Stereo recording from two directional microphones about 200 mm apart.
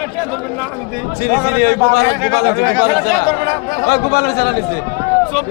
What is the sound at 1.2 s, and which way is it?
A man's voice, 50° left (ahead or behind).